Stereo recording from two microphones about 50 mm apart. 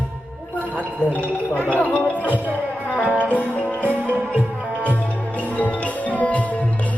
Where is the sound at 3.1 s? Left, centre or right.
Right.